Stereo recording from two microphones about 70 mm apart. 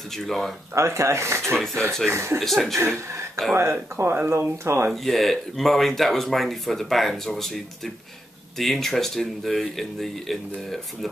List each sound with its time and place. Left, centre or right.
0.1 s speech: centre
0.7 s speech: right
2.4 s speech: centre
2.7 s speech: right
4.9 s speech: centre